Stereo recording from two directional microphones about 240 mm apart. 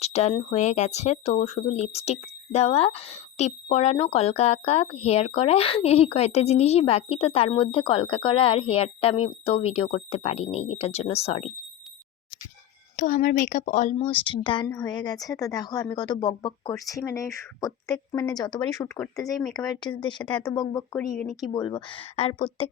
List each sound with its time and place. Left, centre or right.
0.0 s speech: left
13.0 s speech: left; by 19.2 s centre
19.2 s speech: centre
19.6 s speech: centre
20.2 s speech: centre
21.2 s speech: centre
21.5 s speech: centre